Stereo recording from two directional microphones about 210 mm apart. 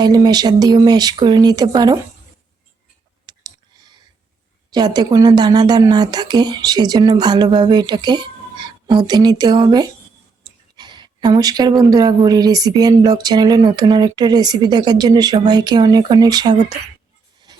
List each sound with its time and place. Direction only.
0.0 s speech: 20° right (ahead or behind)
3.2 s clicking: 20° right (ahead or behind)
4.7 s speech: 20° right (ahead or behind)
17.5 s a sound: 20° right (ahead or behind)